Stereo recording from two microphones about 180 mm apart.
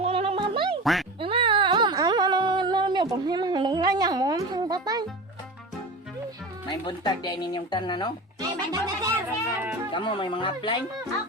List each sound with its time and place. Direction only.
0.0 s music: 35° right (ahead or behind)
1.2 s a sound: 30° right (ahead or behind)
6.7 s speech: 25° left (ahead or behind)
8.4 s speech: 20° right (ahead or behind)
9.9 s speech: 25° left (ahead or behind)